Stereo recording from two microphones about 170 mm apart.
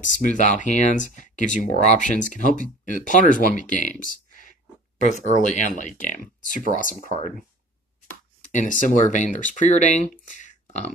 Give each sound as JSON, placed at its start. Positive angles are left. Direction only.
{"t": 0.0, "sound": "speech", "side_deg": 50}
{"t": 5.4, "sound": "speech", "side_deg": 50}
{"t": 8.1, "sound": "speech", "side_deg": 50}
{"t": 10.3, "sound": "a sound", "side_deg": 50}